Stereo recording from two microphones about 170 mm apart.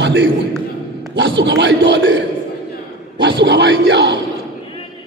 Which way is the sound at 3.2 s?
85° right.